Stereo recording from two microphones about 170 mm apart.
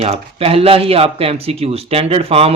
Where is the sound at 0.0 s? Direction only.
35° right (ahead or behind).